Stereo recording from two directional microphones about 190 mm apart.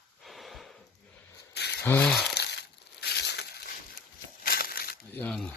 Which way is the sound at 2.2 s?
60° left (ahead or behind).